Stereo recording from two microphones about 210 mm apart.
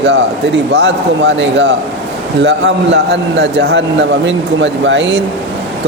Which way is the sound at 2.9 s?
55° right (ahead or behind).